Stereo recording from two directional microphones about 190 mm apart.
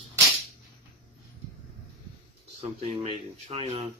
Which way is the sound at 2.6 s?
35° right (ahead or behind).